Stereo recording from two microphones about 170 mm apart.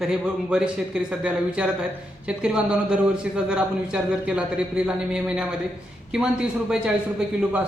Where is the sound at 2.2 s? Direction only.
5° right (ahead or behind).